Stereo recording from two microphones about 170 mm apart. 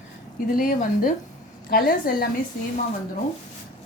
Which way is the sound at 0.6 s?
55° left (ahead or behind).